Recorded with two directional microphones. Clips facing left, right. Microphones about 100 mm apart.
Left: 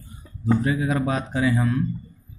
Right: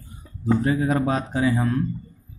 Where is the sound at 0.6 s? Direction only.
35° right (ahead or behind).